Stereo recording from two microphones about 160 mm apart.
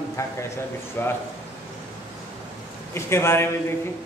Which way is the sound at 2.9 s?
15° left (ahead or behind).